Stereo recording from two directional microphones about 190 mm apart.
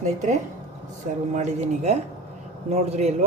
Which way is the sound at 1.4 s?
35° right (ahead or behind).